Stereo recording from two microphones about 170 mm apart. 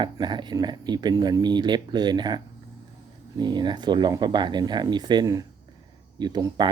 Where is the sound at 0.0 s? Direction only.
25° right (ahead or behind).